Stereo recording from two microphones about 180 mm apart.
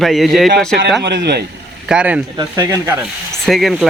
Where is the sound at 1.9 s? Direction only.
5° right (ahead or behind).